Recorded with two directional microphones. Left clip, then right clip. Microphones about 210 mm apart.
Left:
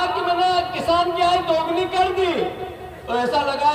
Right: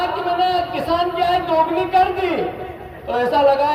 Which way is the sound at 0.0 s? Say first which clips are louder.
Right 1 dB; 55° right (ahead or behind).